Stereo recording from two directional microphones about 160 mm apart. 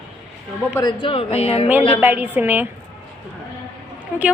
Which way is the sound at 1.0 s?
40° left (ahead or behind).